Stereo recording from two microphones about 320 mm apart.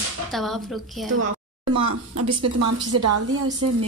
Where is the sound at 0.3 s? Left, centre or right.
Centre.